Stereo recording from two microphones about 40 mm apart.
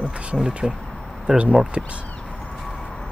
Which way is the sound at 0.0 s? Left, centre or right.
Right.